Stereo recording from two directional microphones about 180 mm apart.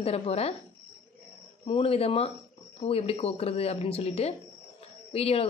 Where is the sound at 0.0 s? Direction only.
35° left (ahead or behind).